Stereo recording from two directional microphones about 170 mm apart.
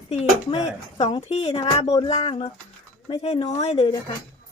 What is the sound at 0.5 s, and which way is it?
Speech, 30° left (ahead or behind).